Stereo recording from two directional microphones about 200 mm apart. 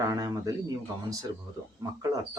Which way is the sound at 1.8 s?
20° right (ahead or behind).